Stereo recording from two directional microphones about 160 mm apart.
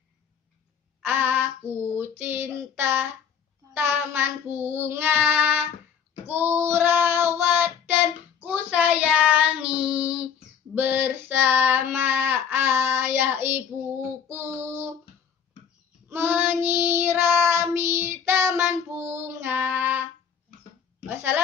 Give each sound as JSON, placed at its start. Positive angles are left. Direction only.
{"t": 1.0, "sound": "female singing", "side_deg": -15}
{"t": 3.7, "sound": "child singing", "side_deg": -15}
{"t": 16.1, "sound": "child singing", "side_deg": -15}
{"t": 21.1, "sound": "a sound", "side_deg": -15}